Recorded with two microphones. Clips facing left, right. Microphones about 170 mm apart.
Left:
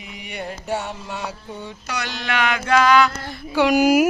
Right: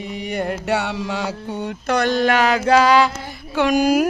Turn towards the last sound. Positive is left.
turn(degrees=5)  # may be behind; listen again after turning